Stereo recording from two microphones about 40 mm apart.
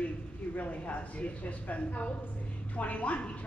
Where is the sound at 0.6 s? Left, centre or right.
Left.